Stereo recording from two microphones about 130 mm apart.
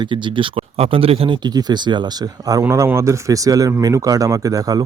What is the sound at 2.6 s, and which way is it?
Speech, 20° right (ahead or behind).